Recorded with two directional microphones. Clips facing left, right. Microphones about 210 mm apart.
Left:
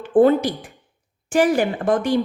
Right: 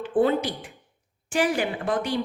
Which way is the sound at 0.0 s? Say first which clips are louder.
Left 7 dB; 45° left (ahead or behind).